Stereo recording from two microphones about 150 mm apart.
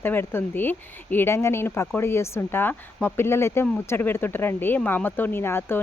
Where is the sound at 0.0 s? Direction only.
15° left (ahead or behind).